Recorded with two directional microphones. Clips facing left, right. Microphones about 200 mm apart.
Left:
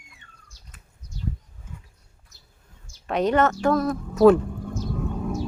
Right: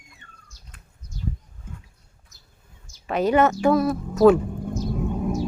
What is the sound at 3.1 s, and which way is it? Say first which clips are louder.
Speech: right 2 dB; 5° right (ahead or behind).